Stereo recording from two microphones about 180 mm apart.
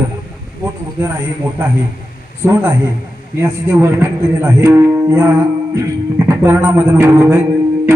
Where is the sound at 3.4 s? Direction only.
15° right (ahead or behind).